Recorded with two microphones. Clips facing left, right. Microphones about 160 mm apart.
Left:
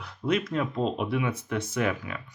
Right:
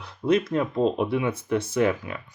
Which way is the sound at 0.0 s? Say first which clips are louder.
Right 5 dB; 30° right (ahead or behind).